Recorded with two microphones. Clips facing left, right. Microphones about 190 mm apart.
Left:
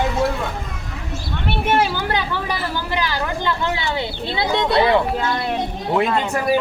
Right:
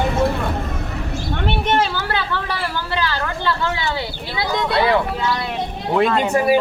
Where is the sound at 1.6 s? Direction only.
10° left (ahead or behind).